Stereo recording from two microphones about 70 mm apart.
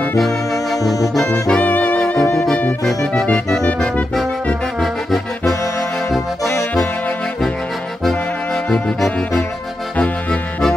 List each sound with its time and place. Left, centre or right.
0.3 s music: centre
1.1 s brass instrument: centre
2.3 s music: centre
6.4 s saxophone: centre
8.6 s brass instrument: centre
9.9 s music: left